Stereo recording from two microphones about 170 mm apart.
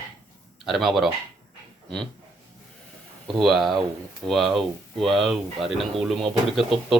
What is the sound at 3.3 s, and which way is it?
Speech, centre (ahead or behind).